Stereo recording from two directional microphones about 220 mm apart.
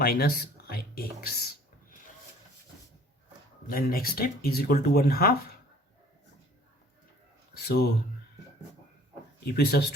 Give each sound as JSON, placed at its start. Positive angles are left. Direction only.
{"t": 0.0, "sound": "a sound", "side_deg": 45}
{"t": 3.7, "sound": "speech", "side_deg": 40}
{"t": 7.5, "sound": "speech", "side_deg": 45}
{"t": 9.5, "sound": "speech", "side_deg": 45}